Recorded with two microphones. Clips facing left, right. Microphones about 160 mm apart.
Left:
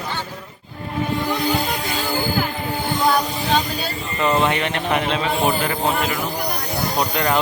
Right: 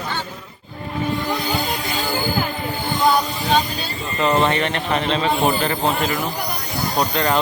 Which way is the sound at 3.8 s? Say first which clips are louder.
Even; 20° right (ahead or behind).